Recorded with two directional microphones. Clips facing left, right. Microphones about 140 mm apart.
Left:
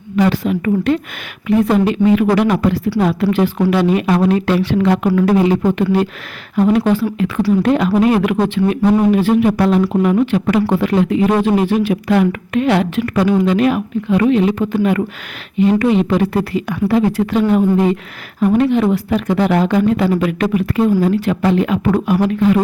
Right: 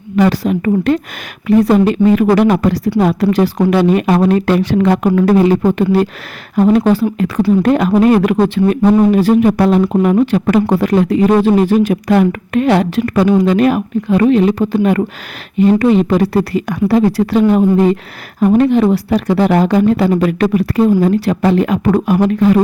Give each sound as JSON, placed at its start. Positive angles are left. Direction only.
{"t": 0.3, "sound": "speech", "side_deg": -40}